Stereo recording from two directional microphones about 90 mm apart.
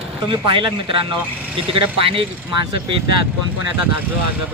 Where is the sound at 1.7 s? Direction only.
90° right.